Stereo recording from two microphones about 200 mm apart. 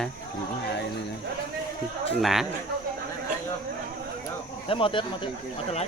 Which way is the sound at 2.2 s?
Centre (ahead or behind).